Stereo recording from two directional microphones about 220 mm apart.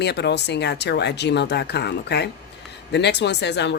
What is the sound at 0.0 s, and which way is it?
Speech, 50° left (ahead or behind).